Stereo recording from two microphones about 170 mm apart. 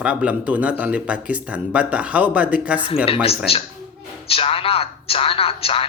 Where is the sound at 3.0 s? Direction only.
35° left (ahead or behind).